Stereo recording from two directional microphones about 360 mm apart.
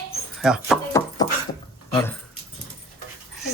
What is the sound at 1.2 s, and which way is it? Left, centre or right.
Dog, centre.